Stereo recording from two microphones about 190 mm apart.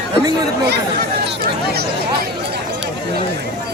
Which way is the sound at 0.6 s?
60° right (ahead or behind).